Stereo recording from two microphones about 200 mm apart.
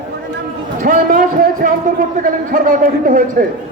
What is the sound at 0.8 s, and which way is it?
A man's voice, 45° right (ahead or behind).